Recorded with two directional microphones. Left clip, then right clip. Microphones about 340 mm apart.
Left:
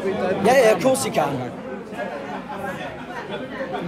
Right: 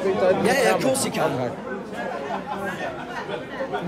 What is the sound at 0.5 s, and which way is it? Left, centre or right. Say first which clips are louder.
Speech: left 4 dB; centre.